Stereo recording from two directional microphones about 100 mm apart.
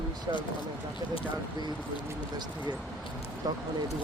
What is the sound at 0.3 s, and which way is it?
Speech, 45° right (ahead or behind).